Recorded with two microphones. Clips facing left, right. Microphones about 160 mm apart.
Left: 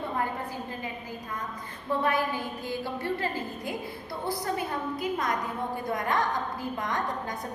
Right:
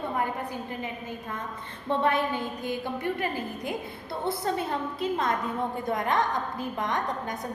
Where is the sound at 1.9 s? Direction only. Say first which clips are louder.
Right 2 dB; 25° right (ahead or behind).